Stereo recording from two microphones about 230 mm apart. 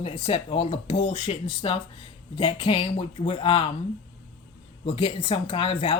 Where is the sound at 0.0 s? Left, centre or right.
Left.